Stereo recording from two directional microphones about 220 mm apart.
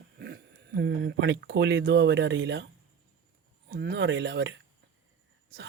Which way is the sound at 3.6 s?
45° right (ahead or behind).